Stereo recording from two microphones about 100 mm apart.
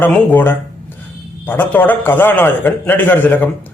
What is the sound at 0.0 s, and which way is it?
A man's voice, 20° left (ahead or behind).